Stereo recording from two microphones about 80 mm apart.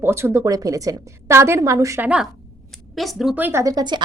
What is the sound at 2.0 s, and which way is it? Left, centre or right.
Speech, centre.